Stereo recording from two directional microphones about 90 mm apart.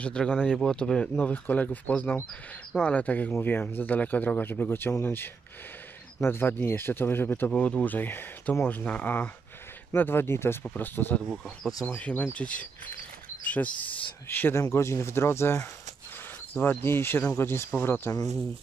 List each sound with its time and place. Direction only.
0.0 s speech: 10° left (ahead or behind)
13.4 s a sound: 15° left (ahead or behind)
14.5 s speech: 30° left (ahead or behind)